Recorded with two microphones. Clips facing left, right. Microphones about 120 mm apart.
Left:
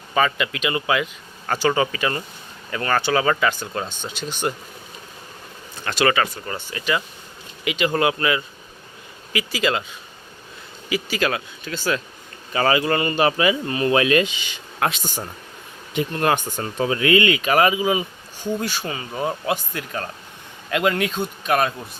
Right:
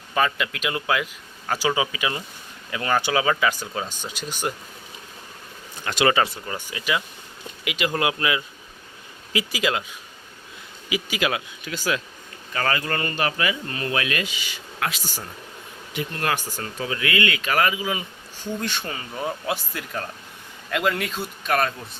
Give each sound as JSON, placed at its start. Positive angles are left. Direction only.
{"t": 0.1, "sound": "speech", "side_deg": 0}
{"t": 5.9, "sound": "speech", "side_deg": -15}
{"t": 6.4, "sound": "speech", "side_deg": -5}
{"t": 9.5, "sound": "speech", "side_deg": -5}
{"t": 10.8, "sound": "speech", "side_deg": -10}
{"t": 12.5, "sound": "speech", "side_deg": 15}